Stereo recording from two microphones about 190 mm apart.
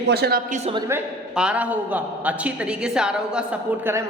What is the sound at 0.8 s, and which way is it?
A man's voice, 10° right (ahead or behind).